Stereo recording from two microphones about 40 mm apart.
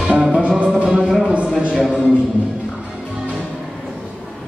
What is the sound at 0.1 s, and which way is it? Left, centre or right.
Music, centre.